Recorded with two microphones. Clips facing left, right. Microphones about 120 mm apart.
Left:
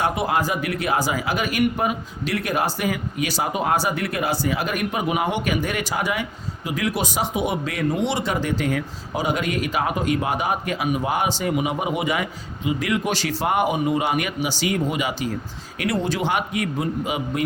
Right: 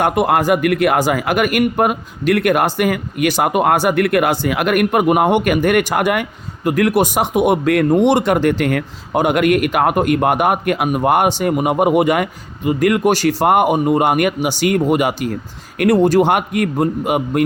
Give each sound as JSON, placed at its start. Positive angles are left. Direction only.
{"t": 0.0, "sound": "speech", "side_deg": -55}